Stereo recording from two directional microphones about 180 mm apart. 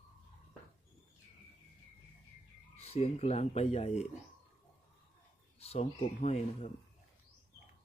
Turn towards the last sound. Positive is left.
turn(degrees=40)  # may be behind; listen again after turning